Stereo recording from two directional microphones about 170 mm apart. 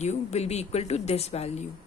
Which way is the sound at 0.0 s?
40° left (ahead or behind).